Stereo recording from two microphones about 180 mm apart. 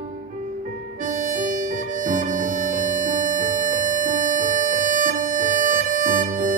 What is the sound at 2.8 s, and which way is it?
Music, 45° right (ahead or behind).